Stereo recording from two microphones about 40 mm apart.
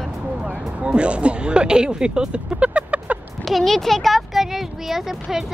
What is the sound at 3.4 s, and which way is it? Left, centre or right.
Speech, centre.